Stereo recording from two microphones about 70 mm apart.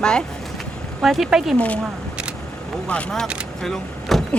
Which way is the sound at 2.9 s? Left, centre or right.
Centre.